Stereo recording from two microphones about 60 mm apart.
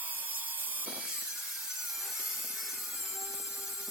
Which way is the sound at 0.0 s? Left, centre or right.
Right.